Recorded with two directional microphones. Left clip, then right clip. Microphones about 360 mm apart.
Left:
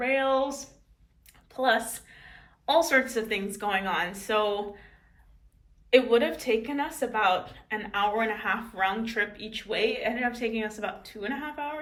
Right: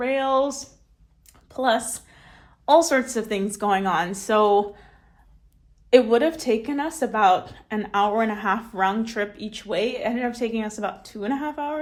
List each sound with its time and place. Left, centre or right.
0.0 s a woman's voice: centre
5.9 s a woman's voice: centre